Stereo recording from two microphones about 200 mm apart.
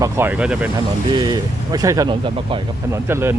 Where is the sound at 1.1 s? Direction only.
20° right (ahead or behind).